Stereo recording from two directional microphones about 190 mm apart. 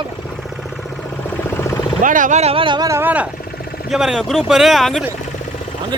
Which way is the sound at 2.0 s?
45° right (ahead or behind).